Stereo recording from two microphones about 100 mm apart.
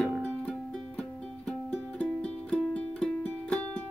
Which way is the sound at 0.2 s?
10° left (ahead or behind).